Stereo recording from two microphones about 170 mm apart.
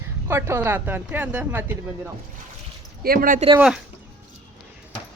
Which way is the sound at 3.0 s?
60° right (ahead or behind).